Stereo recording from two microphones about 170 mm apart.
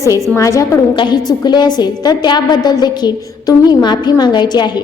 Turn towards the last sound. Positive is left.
turn(degrees=25)  # may be behind; listen again after turning